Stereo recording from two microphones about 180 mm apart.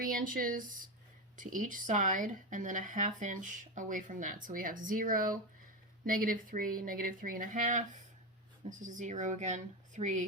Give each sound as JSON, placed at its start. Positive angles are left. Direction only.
{"t": 0.0, "sound": "speech", "side_deg": -50}